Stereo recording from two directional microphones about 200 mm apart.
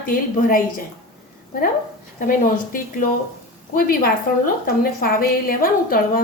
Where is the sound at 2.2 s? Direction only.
45° left (ahead or behind).